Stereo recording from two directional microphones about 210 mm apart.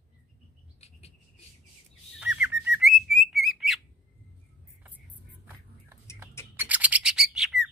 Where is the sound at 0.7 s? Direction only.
30° left (ahead or behind).